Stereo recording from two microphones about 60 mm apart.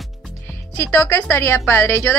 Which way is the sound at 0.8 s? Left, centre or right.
Left.